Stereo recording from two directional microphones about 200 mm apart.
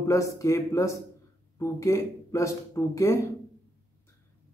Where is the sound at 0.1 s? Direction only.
15° left (ahead or behind).